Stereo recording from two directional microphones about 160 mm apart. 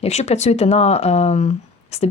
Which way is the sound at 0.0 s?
45° left (ahead or behind).